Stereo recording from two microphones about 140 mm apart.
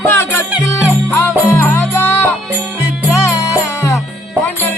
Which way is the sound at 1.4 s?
15° left (ahead or behind).